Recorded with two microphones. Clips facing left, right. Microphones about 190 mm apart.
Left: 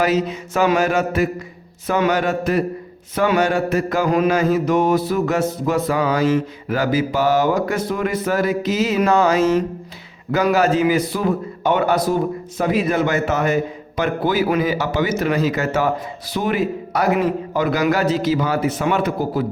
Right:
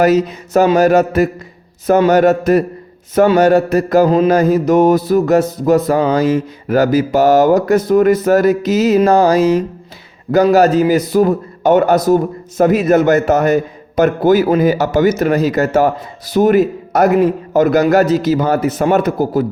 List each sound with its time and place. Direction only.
0.0 s a man's voice: 40° right (ahead or behind)